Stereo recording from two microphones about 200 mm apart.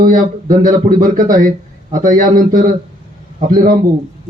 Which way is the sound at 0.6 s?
45° right (ahead or behind).